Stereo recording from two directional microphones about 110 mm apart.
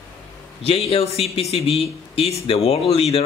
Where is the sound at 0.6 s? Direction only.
60° left (ahead or behind).